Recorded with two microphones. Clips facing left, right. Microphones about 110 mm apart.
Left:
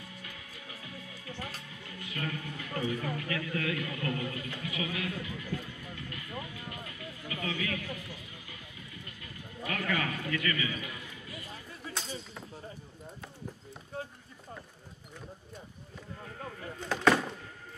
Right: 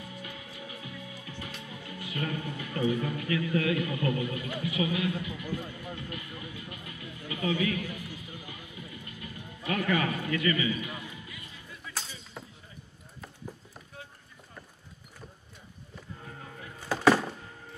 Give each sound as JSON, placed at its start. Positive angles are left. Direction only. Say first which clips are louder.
{"t": 0.2, "sound": "music", "louder": "right 5 dB", "side_deg": -20}
{"t": 1.7, "sound": "a man's voice", "louder": "right 4 dB", "side_deg": -20}
{"t": 7.0, "sound": "music", "louder": "right 6 dB", "side_deg": -20}
{"t": 9.7, "sound": "a man's voice", "louder": "right 5 dB", "side_deg": -20}
{"t": 11.9, "sound": "a sound", "louder": "left 1 dB", "side_deg": 35}
{"t": 16.9, "sound": "a sound", "louder": "right 3 dB", "side_deg": -5}